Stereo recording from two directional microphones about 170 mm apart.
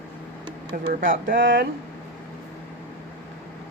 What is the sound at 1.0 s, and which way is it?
Speech, 55° right (ahead or behind).